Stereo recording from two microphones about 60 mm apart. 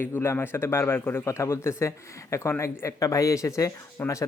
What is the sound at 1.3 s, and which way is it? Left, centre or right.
Speech, left.